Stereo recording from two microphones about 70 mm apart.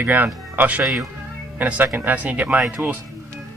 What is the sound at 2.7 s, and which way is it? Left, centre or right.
Speech, right.